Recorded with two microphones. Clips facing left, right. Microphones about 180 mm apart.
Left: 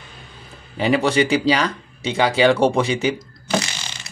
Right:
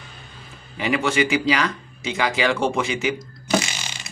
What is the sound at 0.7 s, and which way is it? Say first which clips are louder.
Speech: left 4 dB; 35° left (ahead or behind).